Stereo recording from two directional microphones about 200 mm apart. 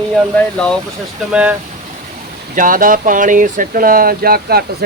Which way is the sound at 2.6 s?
45° right (ahead or behind).